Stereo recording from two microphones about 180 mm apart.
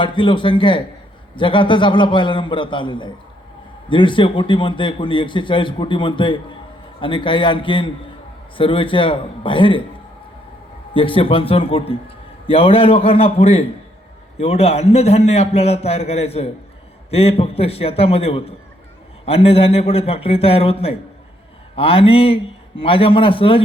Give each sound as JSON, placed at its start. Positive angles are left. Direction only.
{"t": 0.0, "sound": "a man's voice", "side_deg": 25}
{"t": 10.9, "sound": "a man's voice", "side_deg": 30}